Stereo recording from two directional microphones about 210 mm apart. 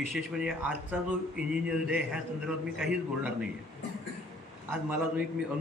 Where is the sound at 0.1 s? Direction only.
5° right (ahead or behind).